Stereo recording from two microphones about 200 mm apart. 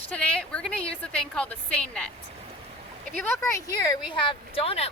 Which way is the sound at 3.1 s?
10° left (ahead or behind).